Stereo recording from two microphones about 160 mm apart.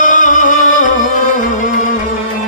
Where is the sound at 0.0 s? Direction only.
55° left (ahead or behind).